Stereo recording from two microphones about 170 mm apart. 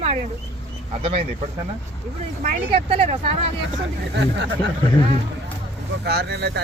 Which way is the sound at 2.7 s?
35° right (ahead or behind).